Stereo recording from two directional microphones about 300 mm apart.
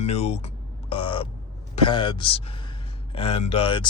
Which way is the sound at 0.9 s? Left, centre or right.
Centre.